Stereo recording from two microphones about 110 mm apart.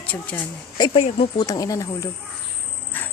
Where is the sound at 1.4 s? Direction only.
35° left (ahead or behind).